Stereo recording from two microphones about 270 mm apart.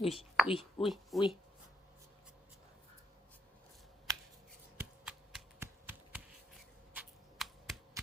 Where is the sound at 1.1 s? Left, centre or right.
Centre.